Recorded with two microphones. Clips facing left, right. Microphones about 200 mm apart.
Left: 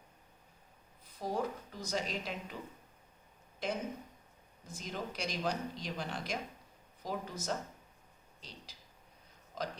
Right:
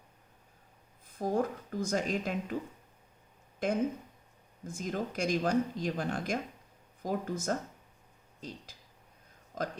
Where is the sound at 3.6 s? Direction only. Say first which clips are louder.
Right 7 dB; 50° right (ahead or behind).